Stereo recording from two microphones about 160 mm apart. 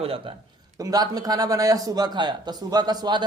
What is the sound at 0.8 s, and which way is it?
A man's voice, 25° right (ahead or behind).